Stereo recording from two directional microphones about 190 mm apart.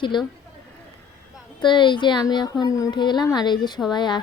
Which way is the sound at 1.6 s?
25° left (ahead or behind).